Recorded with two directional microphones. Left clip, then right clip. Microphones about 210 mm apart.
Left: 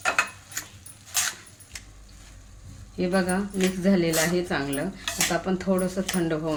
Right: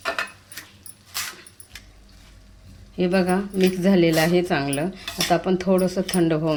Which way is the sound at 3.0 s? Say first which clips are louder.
Right 4 dB; 35° right (ahead or behind).